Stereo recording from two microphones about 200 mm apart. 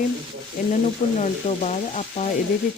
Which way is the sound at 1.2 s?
35° left (ahead or behind).